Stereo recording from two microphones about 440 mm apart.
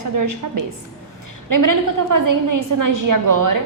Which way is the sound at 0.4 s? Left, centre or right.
Right.